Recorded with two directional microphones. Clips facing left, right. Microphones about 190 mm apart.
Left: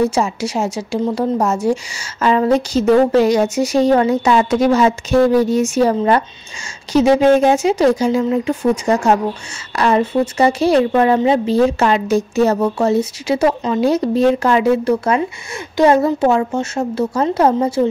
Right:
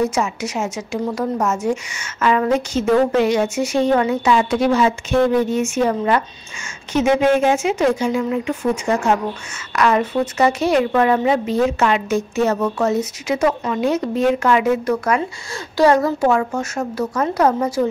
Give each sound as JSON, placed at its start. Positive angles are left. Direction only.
{"t": 0.0, "sound": "speech", "side_deg": 30}